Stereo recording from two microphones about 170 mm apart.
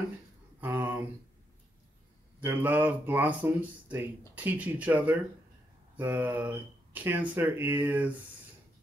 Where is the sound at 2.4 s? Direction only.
10° right (ahead or behind).